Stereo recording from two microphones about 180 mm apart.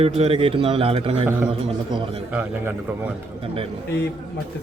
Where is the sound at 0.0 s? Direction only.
35° right (ahead or behind).